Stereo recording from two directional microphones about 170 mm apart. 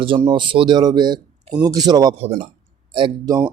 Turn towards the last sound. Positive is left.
turn(degrees=-25)  # may be behind; listen again after turning